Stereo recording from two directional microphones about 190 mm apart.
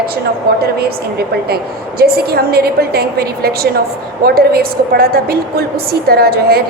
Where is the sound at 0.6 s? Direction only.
55° right (ahead or behind).